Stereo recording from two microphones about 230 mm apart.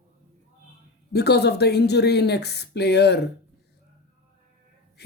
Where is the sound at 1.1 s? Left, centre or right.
Left.